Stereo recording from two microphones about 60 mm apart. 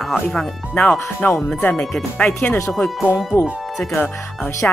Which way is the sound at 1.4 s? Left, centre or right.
Centre.